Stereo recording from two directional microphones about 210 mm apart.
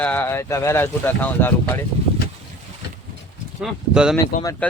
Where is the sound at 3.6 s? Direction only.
5° right (ahead or behind).